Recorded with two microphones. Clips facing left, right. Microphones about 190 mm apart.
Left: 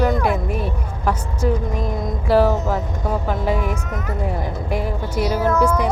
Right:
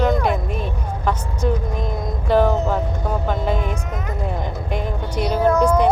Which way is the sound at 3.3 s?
10° left (ahead or behind).